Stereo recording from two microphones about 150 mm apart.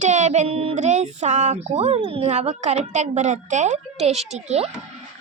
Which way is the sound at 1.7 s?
40° right (ahead or behind).